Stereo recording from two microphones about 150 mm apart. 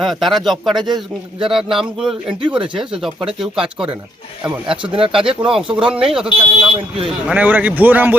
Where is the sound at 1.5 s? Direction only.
Centre (ahead or behind).